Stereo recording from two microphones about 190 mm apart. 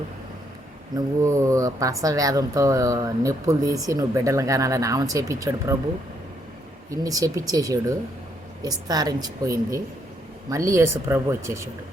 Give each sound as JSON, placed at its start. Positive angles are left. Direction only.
{"t": 0.9, "sound": "speech", "side_deg": -15}
{"t": 6.9, "sound": "a woman's voice", "side_deg": -20}